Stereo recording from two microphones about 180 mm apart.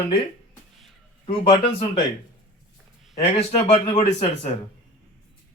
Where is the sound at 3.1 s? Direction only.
35° left (ahead or behind).